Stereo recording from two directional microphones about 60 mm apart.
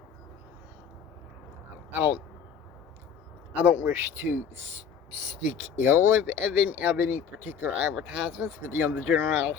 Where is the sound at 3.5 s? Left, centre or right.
Right.